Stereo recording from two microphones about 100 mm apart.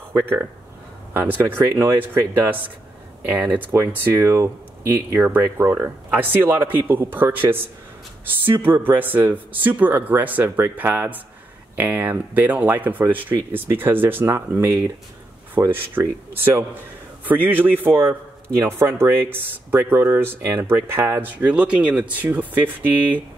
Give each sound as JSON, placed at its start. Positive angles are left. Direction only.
{"t": 1.1, "sound": "speech", "side_deg": -20}
{"t": 8.8, "sound": "speech", "side_deg": -20}